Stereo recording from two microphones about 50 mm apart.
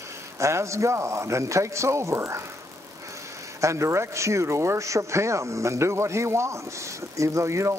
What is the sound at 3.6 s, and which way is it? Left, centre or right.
Speech, right.